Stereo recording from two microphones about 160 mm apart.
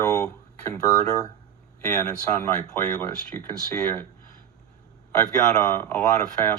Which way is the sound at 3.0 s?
15° left (ahead or behind).